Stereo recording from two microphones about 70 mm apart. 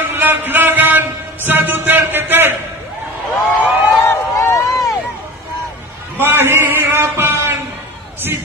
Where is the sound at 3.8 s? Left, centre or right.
Left.